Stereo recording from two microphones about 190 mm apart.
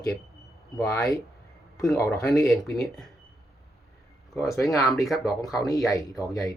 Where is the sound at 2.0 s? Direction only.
15° left (ahead or behind).